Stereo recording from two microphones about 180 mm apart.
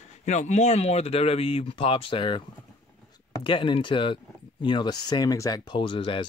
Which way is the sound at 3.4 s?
30° left (ahead or behind).